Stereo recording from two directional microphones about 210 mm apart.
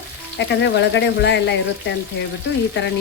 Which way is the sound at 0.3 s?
55° left (ahead or behind).